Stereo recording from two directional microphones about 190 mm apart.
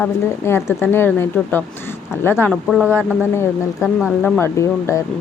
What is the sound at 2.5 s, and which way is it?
Speech, centre (ahead or behind).